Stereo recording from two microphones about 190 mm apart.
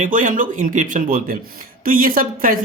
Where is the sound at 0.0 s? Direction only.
45° right (ahead or behind).